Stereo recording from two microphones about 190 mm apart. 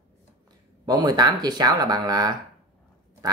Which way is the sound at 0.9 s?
20° right (ahead or behind).